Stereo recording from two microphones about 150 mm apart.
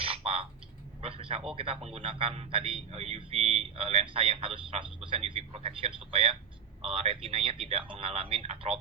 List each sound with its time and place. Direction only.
0.0 s frog: 40° right (ahead or behind)
1.0 s a sound: 40° right (ahead or behind)
1.5 s a man's voice: 40° right (ahead or behind)